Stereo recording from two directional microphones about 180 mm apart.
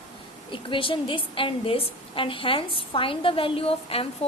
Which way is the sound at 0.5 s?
30° left (ahead or behind).